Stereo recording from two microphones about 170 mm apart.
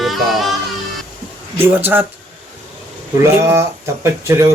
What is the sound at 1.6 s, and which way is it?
Speech, 10° right (ahead or behind).